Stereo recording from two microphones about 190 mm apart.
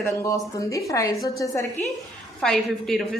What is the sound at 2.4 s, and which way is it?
Speech, 5° left (ahead or behind).